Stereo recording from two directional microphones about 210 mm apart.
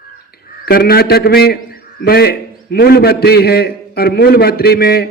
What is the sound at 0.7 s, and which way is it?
A man's voice, 45° left (ahead or behind).